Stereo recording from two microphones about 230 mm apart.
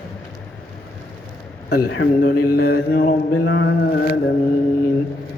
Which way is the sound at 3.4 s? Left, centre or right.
Left.